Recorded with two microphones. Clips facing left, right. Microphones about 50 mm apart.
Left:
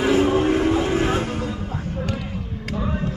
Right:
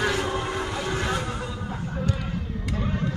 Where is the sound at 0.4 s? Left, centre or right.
Left.